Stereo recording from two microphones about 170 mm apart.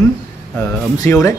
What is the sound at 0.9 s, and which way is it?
Speech, 20° left (ahead or behind).